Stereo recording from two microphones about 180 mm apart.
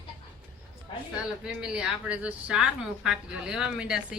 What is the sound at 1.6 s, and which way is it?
Speech, 5° right (ahead or behind).